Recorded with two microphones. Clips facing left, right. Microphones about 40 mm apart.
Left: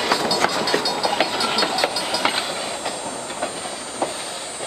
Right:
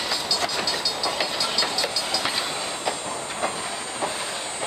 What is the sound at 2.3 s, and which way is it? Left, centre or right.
Train, left.